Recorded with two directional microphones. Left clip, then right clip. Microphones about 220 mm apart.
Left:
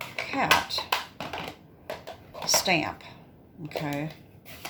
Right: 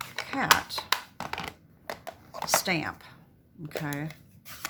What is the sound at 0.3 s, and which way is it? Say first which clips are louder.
Speech: left 1 dB; 20° right (ahead or behind).